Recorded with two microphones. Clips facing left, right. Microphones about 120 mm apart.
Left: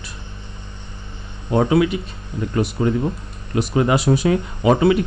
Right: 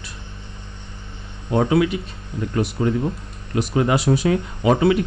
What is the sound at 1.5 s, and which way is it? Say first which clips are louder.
Speech: left 1 dB; 25° left (ahead or behind).